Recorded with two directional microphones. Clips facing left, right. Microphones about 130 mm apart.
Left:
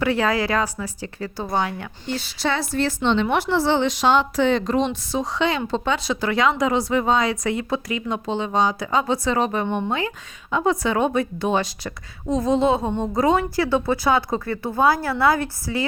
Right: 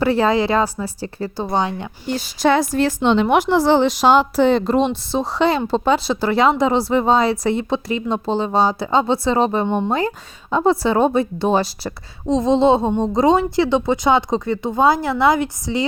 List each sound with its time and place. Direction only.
0.0 s speech: 30° right (ahead or behind)
2.1 s a woman's voice: 45° right (ahead or behind)
12.2 s speech: 25° right (ahead or behind)